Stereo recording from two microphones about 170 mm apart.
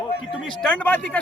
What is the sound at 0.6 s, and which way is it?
Speech, 5° left (ahead or behind).